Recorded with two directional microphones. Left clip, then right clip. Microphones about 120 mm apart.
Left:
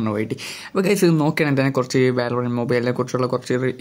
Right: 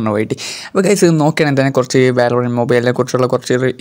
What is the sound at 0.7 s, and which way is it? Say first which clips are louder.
Speech: right 6 dB; 40° right (ahead or behind).